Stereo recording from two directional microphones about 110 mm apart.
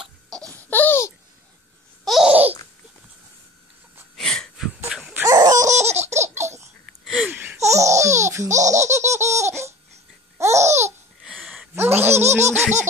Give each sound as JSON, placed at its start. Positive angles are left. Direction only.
{"t": 0.5, "sound": "a sound", "side_deg": 15}
{"t": 2.0, "sound": "babbling", "side_deg": 0}
{"t": 4.2, "sound": "a sound", "side_deg": 5}
{"t": 5.2, "sound": "laughter", "side_deg": -35}
{"t": 5.9, "sound": "laughter", "side_deg": -80}
{"t": 6.1, "sound": "laughter", "side_deg": -25}
{"t": 7.5, "sound": "laughter", "side_deg": -25}
{"t": 10.3, "sound": "babbling", "side_deg": -25}
{"t": 11.7, "sound": "a sound", "side_deg": -20}
{"t": 12.3, "sound": "laughter", "side_deg": -25}